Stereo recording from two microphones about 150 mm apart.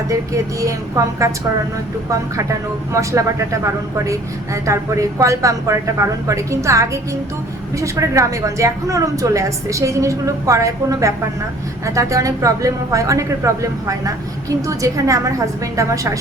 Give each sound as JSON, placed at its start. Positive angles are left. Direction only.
{"t": 0.6, "sound": "a woman's voice", "side_deg": -20}
{"t": 2.9, "sound": "a woman's voice", "side_deg": -20}